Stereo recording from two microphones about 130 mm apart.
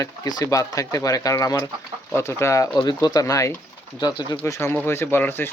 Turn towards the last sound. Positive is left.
turn(degrees=15)  # may be behind; listen again after turning